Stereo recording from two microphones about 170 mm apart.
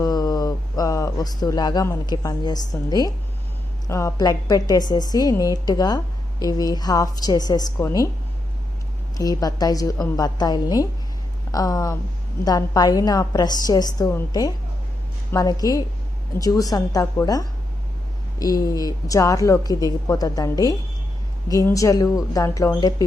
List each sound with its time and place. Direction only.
0.0 s speech: 25° left (ahead or behind)
9.1 s speech: 20° left (ahead or behind)